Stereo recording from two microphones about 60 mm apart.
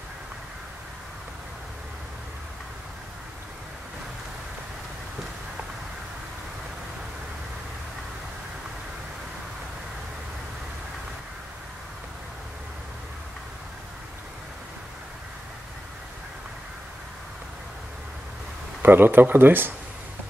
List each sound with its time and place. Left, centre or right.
18.8 s speech: right